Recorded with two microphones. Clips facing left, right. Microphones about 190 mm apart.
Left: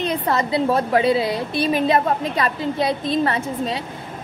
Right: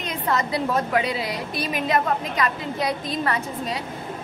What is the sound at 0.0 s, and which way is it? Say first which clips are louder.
A woman's voice: left 4 dB; 30° left (ahead or behind).